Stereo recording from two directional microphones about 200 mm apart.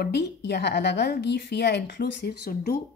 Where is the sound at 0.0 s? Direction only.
55° left (ahead or behind).